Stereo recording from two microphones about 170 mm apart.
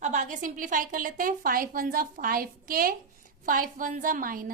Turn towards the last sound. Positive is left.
turn(degrees=-55)  # may be behind; listen again after turning